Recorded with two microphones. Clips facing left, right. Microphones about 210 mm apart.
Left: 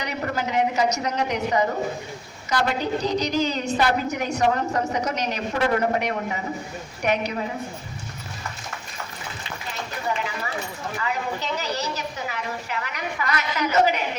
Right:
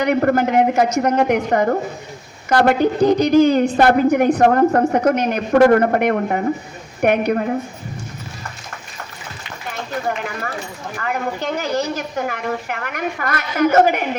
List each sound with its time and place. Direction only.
0.0 s a woman's voice: 55° right (ahead or behind)
10.1 s clip-clop: 55° right (ahead or behind)
10.9 s a woman's voice: 55° right (ahead or behind)